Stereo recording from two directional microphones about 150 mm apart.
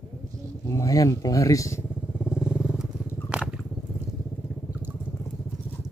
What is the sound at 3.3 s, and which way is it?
Biting, 5° right (ahead or behind).